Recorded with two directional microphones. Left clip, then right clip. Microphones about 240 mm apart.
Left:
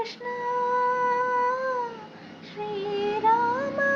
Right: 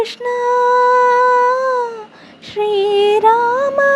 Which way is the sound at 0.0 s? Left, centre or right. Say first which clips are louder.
Right 13 dB; right.